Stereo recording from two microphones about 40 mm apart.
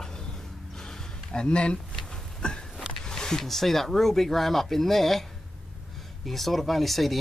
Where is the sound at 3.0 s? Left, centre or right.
Centre.